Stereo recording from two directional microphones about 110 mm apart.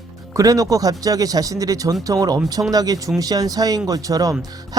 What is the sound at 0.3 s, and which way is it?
Speech, 30° right (ahead or behind).